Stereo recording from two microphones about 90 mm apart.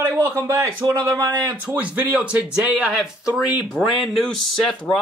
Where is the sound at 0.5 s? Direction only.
40° right (ahead or behind).